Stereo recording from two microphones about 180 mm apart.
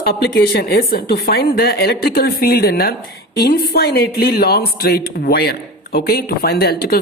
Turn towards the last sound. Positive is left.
turn(degrees=60)  # may be behind; listen again after turning